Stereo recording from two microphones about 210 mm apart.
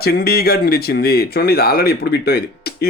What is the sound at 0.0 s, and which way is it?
Speech, 50° left (ahead or behind).